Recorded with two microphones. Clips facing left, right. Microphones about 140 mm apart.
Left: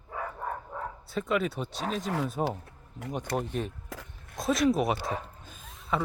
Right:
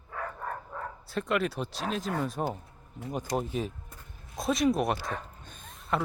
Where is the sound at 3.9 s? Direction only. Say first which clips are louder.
Left 7 dB; 90° left.